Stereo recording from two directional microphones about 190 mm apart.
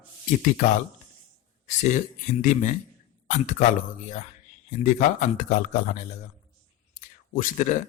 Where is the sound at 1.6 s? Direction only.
40° left (ahead or behind).